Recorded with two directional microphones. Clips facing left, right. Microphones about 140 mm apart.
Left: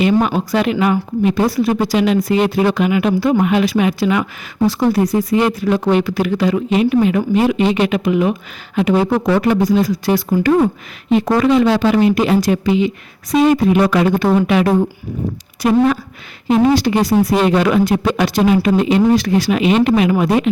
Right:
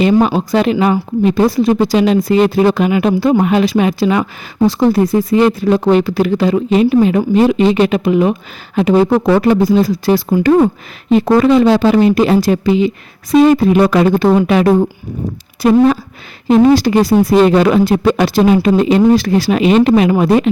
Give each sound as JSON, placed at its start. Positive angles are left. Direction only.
{"t": 0.0, "sound": "a woman's voice", "side_deg": -35}
{"t": 16.6, "sound": "a woman's voice", "side_deg": -40}